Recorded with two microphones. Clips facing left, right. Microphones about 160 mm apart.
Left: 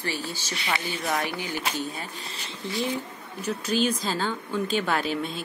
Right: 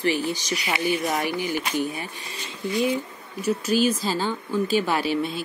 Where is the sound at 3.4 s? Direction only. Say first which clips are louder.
Right 4 dB; 10° right (ahead or behind).